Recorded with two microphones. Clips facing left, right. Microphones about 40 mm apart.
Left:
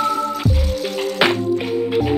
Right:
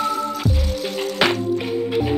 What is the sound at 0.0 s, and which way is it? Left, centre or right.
Music, centre.